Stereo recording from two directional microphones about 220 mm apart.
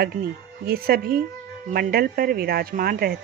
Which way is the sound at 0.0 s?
45° right (ahead or behind).